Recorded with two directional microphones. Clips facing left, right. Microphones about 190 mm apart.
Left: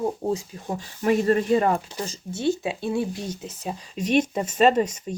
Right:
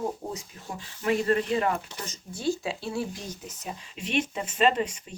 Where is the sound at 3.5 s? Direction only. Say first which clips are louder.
Left 6 dB; 35° left (ahead or behind).